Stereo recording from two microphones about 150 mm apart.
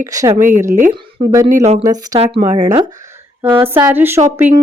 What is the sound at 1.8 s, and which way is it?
Speech, 25° right (ahead or behind).